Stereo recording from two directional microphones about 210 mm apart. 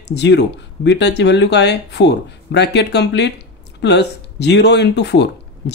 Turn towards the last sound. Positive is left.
turn(degrees=55)  # may be behind; listen again after turning